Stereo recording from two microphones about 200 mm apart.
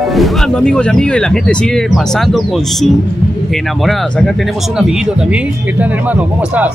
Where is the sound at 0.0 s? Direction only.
Centre (ahead or behind).